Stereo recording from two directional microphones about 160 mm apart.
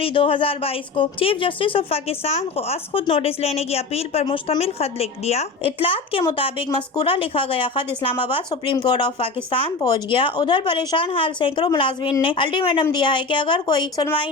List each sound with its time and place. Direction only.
0.0 s a woman's voice: 35° left (ahead or behind)